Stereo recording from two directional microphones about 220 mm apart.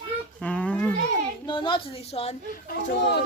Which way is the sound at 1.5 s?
20° left (ahead or behind).